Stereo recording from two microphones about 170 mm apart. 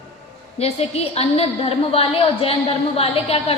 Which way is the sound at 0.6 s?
35° left (ahead or behind).